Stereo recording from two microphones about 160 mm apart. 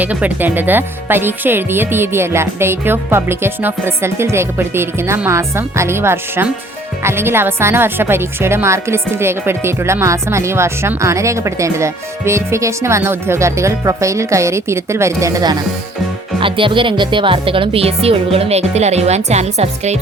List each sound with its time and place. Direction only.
0.0 s speech: 10° right (ahead or behind)
16.4 s speech: 30° right (ahead or behind)